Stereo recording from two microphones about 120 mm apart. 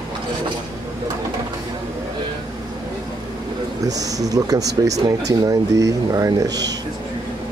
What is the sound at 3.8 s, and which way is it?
Speech, 30° right (ahead or behind).